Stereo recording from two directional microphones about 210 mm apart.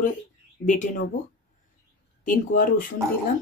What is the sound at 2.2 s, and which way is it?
Speech, 40° left (ahead or behind).